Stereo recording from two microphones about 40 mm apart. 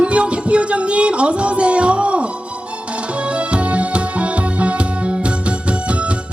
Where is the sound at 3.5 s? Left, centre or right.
Right.